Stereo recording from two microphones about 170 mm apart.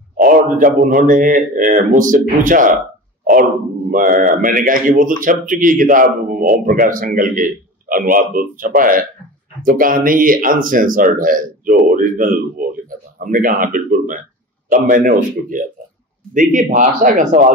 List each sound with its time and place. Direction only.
0.2 s a man's voice: 55° right (ahead or behind)
3.9 s a man's voice: 55° right (ahead or behind)